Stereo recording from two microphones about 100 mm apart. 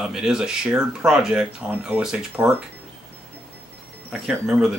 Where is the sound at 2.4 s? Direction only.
20° right (ahead or behind).